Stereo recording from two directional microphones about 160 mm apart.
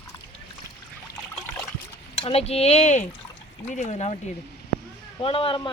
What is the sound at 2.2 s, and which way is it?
Speech, 40° left (ahead or behind).